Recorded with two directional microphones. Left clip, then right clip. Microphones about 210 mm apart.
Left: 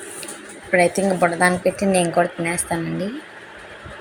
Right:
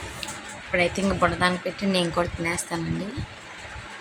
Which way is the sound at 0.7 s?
15° left (ahead or behind).